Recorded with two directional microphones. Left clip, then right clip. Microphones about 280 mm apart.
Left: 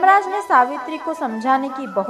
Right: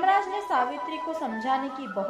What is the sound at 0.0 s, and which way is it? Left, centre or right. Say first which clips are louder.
A woman's voice: left 9 dB; left.